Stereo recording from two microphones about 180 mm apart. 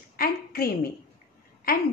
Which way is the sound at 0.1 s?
55° left (ahead or behind).